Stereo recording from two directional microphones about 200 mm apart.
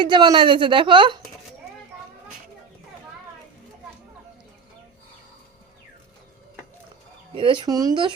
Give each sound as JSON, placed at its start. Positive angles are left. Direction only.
{"t": 0.0, "sound": "a woman's voice", "side_deg": -20}
{"t": 7.3, "sound": "a woman's voice", "side_deg": -25}